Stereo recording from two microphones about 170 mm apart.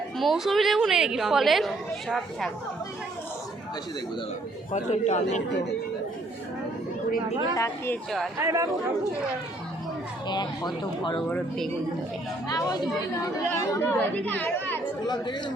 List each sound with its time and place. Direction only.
0.2 s a woman's voice: centre (ahead or behind)
4.7 s a man's voice: 45° left (ahead or behind)
7.5 s speech: 15° left (ahead or behind)
8.4 s speech: 15° right (ahead or behind)
10.2 s speech: 25° left (ahead or behind)
11.3 s a woman's voice: centre (ahead or behind)
12.5 s speech: 25° left (ahead or behind)
15.0 s speech: 25° left (ahead or behind)